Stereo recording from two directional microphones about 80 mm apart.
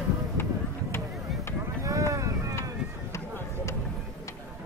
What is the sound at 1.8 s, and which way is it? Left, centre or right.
Boat, right.